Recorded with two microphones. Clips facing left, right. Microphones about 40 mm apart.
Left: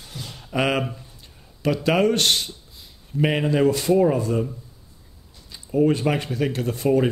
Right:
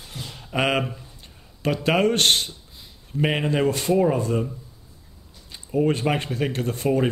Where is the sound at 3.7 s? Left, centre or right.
Right.